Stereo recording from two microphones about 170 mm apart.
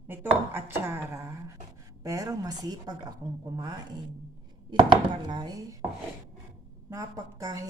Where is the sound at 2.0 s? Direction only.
20° right (ahead or behind).